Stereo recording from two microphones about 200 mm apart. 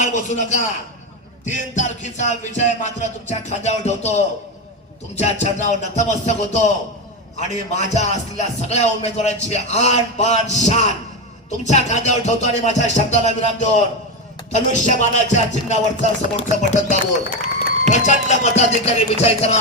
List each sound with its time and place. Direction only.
0.0 s speech: 40° left (ahead or behind)